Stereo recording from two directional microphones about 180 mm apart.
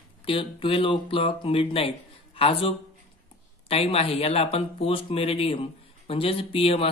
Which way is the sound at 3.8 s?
35° left (ahead or behind).